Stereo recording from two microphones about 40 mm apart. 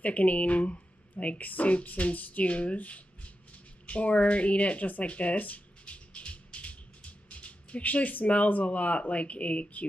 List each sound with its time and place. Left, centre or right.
0.0 s speech: left